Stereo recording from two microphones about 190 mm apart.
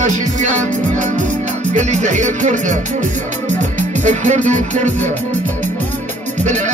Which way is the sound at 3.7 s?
40° right (ahead or behind).